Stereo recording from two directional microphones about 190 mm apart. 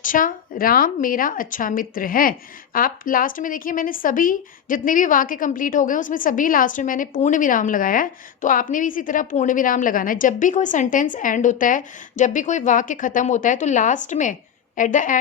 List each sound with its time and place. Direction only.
0.0 s a woman's voice: 45° left (ahead or behind)